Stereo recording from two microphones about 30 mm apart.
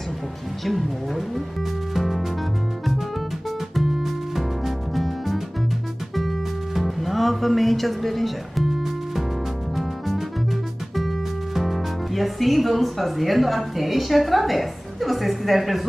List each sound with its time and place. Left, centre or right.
0.7 s speech: centre
2.0 s music: centre
3.7 s music: centre
8.6 s music: centre
11.0 s speech: centre